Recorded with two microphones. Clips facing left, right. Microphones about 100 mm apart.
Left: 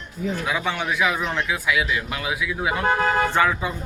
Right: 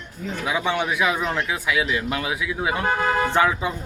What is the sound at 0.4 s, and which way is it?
Speech, 20° right (ahead or behind).